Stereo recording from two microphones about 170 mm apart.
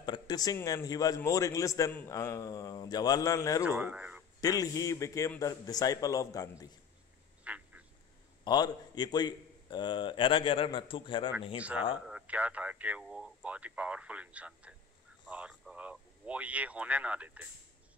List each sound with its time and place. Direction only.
0.0 s a man's voice: 25° left (ahead or behind)
3.6 s speech: 10° right (ahead or behind)
4.4 s a man's voice: 20° left (ahead or behind)
7.4 s duck: 5° right (ahead or behind)
8.5 s a man's voice: 25° left (ahead or behind)
11.5 s speech: 10° right (ahead or behind)
15.2 s a sound: 5° right (ahead or behind)